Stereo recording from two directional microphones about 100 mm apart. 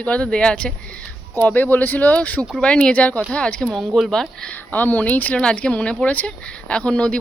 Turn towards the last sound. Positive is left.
turn(degrees=10)  # may be behind; listen again after turning